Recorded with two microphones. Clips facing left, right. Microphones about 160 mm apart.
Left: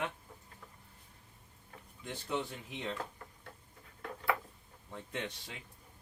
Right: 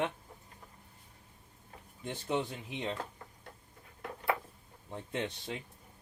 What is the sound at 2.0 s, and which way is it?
Speech, 25° right (ahead or behind).